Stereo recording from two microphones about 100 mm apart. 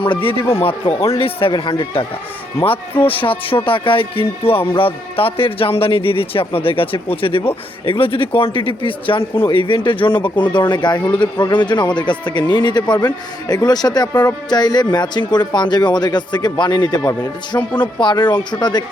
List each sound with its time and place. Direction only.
0.0 s speech: 60° left (ahead or behind)
0.5 s a man's voice: 75° left (ahead or behind); by 17.0 s 45° left (ahead or behind)
18.0 s speech: 50° left (ahead or behind)